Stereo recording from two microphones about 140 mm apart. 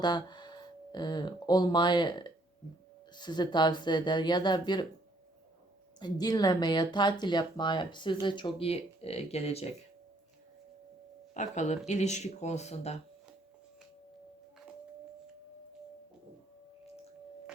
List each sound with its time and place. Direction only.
0.0 s speech: 30° left (ahead or behind)
6.0 s speech: 30° left (ahead or behind); by 9.6 s 50° left (ahead or behind)
11.3 s speech: 60° left (ahead or behind)